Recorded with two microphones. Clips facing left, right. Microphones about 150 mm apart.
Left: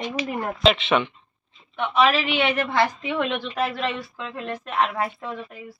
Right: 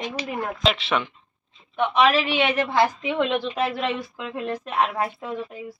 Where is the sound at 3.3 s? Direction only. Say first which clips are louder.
Right 2 dB; 20° right (ahead or behind).